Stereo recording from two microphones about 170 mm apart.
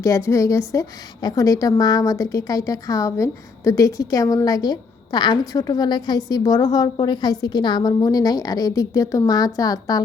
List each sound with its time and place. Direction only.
0.0 s a woman's voice: 15° left (ahead or behind)